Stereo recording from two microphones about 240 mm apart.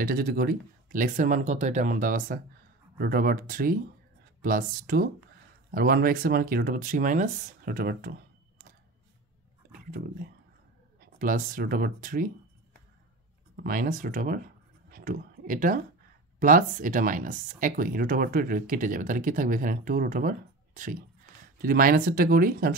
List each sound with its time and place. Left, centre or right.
0.0 s speech: right
9.7 s speech: right
13.6 s speech: right
14.9 s a sound: right
16.3 s speech: right